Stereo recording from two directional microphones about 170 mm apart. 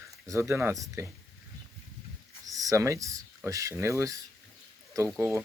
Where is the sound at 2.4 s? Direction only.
20° right (ahead or behind).